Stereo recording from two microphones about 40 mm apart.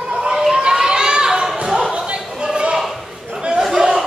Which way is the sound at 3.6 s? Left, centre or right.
Centre.